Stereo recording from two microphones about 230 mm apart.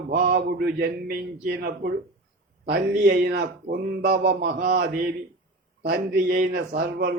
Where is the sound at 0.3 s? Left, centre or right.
Right.